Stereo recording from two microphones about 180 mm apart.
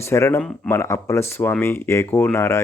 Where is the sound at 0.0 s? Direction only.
15° left (ahead or behind).